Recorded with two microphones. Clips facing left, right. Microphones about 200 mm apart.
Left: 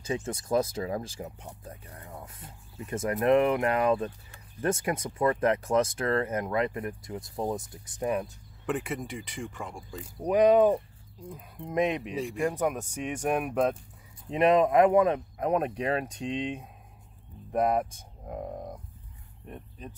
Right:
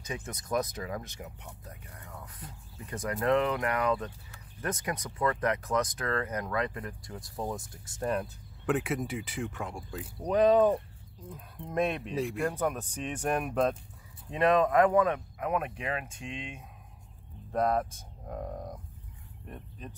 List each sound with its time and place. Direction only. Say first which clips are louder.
0.0 s speech: left 7 dB; 30° left (ahead or behind)
8.2 s speech: left 2 dB; centre (ahead or behind)
10.2 s speech: left 2 dB; 10° left (ahead or behind)
14.3 s speech: left 3 dB; 20° left (ahead or behind)
17.5 s a sound: left 2 dB; 15° left (ahead or behind)